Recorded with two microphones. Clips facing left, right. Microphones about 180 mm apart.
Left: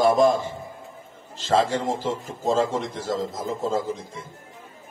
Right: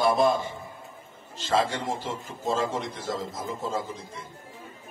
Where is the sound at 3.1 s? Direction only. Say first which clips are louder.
Left 6 dB; 90° left.